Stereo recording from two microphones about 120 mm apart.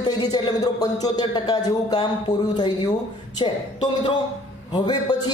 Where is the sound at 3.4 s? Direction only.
45° left (ahead or behind).